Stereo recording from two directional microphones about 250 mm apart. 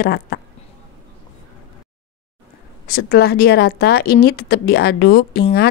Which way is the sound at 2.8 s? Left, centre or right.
Left.